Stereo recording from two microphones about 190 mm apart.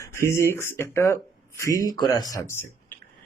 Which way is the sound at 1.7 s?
20° right (ahead or behind).